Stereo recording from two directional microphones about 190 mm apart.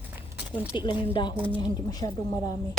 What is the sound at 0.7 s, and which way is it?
Speech, 25° left (ahead or behind).